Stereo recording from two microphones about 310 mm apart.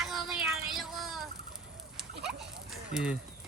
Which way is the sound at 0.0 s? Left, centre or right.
Centre.